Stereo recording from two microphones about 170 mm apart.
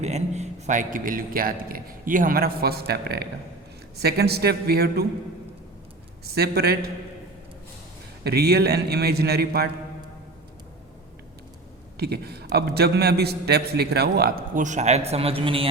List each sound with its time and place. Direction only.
0.0 s a man's voice: 40° right (ahead or behind); by 5.0 s 65° right (ahead or behind)
6.2 s a man's voice: 70° right (ahead or behind)
8.2 s a man's voice: 70° right (ahead or behind)
11.9 s a man's voice: 70° right (ahead or behind); by 15.7 s 35° right (ahead or behind)